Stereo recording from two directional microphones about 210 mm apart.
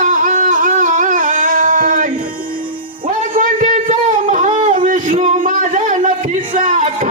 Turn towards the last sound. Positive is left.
turn(degrees=-35)  # may be behind; listen again after turning